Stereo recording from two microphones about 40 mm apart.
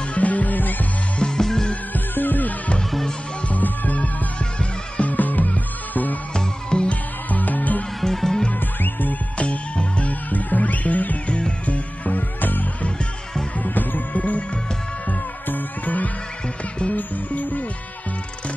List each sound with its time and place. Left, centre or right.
0.1 s music: left
1.2 s music: centre
2.1 s music: left
4.6 s music: left
5.1 s music: left
6.3 s music: left
6.9 s music: left
8.0 s music: centre
9.4 s music: left
13.7 s music: left